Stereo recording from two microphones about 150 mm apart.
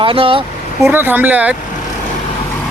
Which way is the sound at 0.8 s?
15° right (ahead or behind).